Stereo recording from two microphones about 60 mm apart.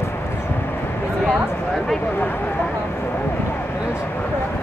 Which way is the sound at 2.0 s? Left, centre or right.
Left.